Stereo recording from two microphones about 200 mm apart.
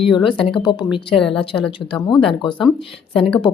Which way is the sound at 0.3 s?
25° left (ahead or behind).